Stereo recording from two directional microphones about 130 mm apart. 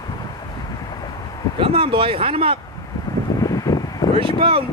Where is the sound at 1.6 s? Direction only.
45° right (ahead or behind).